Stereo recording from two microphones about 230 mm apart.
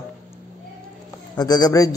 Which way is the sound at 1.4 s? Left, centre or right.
Centre.